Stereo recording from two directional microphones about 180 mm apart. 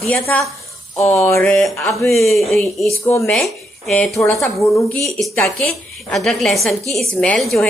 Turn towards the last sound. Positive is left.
turn(degrees=0)  # may be behind; listen again after turning